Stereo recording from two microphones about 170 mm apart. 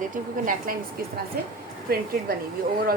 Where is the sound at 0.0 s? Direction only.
55° right (ahead or behind).